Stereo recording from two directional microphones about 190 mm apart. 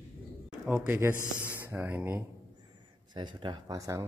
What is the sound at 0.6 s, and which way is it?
Speech, 10° right (ahead or behind).